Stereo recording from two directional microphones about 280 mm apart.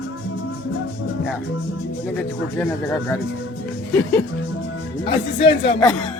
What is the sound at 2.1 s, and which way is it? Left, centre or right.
Speech, centre.